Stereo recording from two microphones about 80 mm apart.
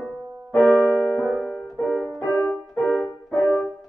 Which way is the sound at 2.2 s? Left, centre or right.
Left.